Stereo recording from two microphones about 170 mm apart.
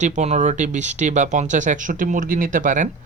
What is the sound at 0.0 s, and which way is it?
Speech, 45° right (ahead or behind).